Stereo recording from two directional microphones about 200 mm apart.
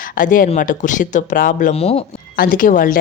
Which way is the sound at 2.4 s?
40° left (ahead or behind).